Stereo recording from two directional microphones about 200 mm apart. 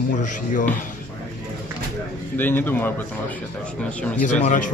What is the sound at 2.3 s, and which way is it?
Speech, 10° left (ahead or behind).